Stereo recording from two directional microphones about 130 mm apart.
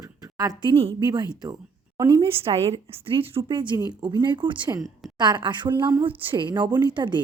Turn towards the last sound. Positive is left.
turn(degrees=-35)  # may be behind; listen again after turning